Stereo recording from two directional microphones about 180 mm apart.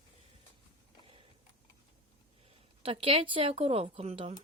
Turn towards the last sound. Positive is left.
turn(degrees=-30)  # may be behind; listen again after turning